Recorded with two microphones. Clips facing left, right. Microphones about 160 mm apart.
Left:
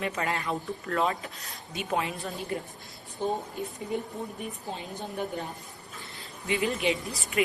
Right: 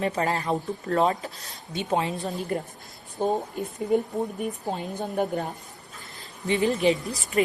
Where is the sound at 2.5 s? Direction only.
45° right (ahead or behind).